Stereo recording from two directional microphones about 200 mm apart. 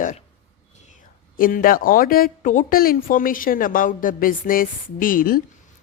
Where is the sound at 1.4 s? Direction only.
45° left (ahead or behind).